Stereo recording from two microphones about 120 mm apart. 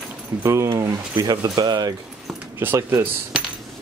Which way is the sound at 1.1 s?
35° right (ahead or behind).